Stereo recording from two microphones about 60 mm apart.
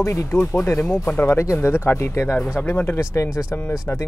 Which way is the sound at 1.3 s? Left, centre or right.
Left.